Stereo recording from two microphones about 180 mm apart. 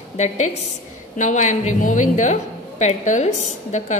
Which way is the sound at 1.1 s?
45° left (ahead or behind).